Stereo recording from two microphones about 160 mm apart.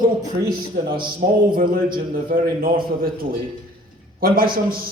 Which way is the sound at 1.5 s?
65° right (ahead or behind).